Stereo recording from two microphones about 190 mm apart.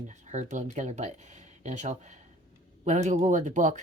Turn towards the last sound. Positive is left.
turn(degrees=-40)  # may be behind; listen again after turning